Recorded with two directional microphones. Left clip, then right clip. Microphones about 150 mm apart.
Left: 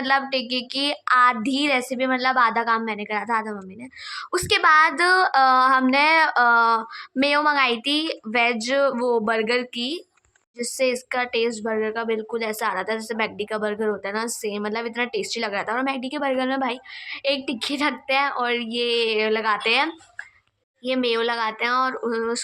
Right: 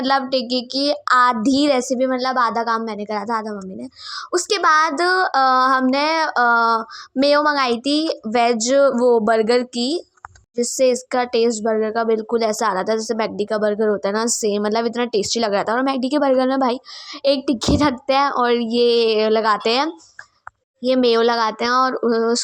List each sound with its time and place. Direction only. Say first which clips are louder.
0.0 s female singing: right 3 dB; 40° right (ahead or behind)
10.6 s a woman's voice: right 6 dB; 35° right (ahead or behind); by 22.0 s 50° right (ahead or behind)